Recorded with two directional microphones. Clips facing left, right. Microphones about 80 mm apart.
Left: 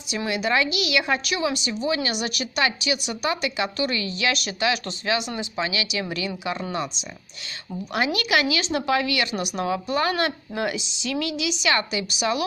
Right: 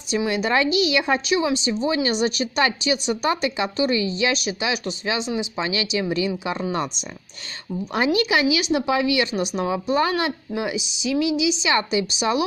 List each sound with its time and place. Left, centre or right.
0.3 s a woman's voice: right
5.6 s a woman's voice: right